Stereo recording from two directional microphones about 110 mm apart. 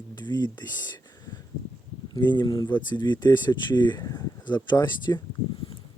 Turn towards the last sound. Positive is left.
turn(degrees=40)  # may be behind; listen again after turning